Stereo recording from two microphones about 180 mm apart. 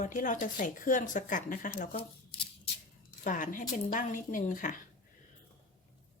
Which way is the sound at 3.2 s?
45° left (ahead or behind).